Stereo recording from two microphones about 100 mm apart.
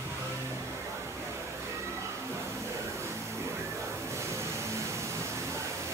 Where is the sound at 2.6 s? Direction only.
30° right (ahead or behind).